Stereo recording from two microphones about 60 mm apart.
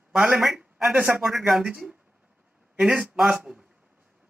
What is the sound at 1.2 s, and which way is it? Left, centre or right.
Speech, centre.